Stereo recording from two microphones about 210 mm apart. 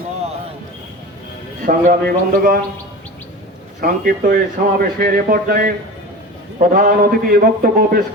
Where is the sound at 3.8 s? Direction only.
45° right (ahead or behind).